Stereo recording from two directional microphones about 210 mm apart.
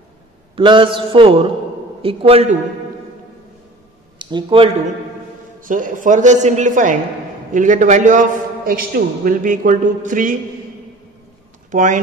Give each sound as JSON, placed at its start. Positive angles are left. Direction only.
{"t": 0.6, "sound": "a man's voice", "side_deg": -25}
{"t": 4.2, "sound": "speech", "side_deg": -20}
{"t": 5.6, "sound": "a man's voice", "side_deg": -40}
{"t": 11.7, "sound": "a man's voice", "side_deg": -35}